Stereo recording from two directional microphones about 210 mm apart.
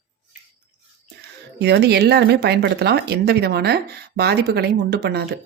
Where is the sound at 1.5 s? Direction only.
50° right (ahead or behind).